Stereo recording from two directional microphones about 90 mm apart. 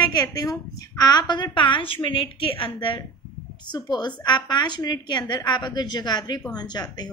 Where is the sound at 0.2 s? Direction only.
40° left (ahead or behind); by 3.0 s 75° left (ahead or behind).